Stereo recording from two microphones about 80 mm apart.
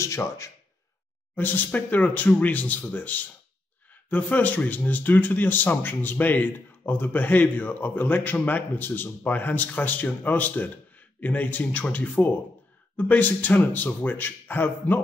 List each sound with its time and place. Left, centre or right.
0.0 s speech: left
1.3 s speech: left